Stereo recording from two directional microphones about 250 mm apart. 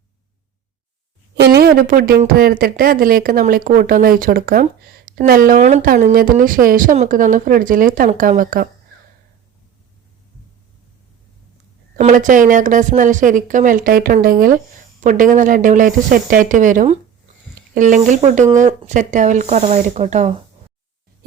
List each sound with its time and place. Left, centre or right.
1.4 s speech: right
11.9 s speech: right